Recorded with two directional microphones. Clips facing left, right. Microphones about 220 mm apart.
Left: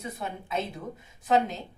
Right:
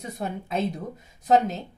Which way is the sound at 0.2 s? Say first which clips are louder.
Right 6 dB; 40° right (ahead or behind).